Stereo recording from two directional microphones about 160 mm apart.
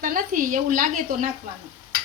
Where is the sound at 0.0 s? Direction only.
60° right (ahead or behind).